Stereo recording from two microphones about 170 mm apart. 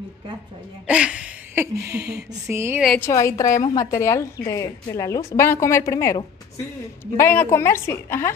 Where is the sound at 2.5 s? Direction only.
15° right (ahead or behind).